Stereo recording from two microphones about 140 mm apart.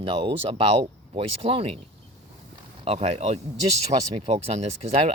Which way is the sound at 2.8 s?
45° right (ahead or behind).